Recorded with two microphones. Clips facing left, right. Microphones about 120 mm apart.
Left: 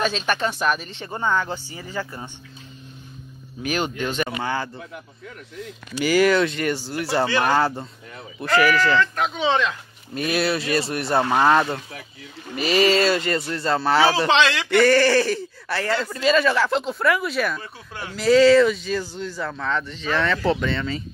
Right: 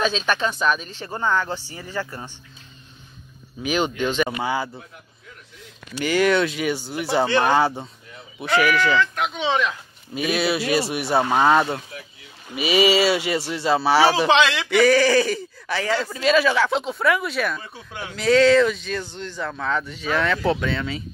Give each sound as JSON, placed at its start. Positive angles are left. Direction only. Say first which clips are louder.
{"t": 0.6, "sound": "speech", "louder": "right 1 dB", "side_deg": 70}
{"t": 1.0, "sound": "speech", "louder": "even", "side_deg": 20}
{"t": 3.6, "sound": "speech", "louder": "right 2 dB", "side_deg": 45}
{"t": 4.4, "sound": "speech", "louder": "right 2 dB", "side_deg": -10}
{"t": 5.9, "sound": "speech", "louder": "left 1 dB", "side_deg": 0}
{"t": 7.2, "sound": "speech", "louder": "right 3 dB", "side_deg": -20}
{"t": 7.5, "sound": "speech", "louder": "right 1 dB", "side_deg": 0}
{"t": 14.7, "sound": "speech", "louder": "even", "side_deg": 0}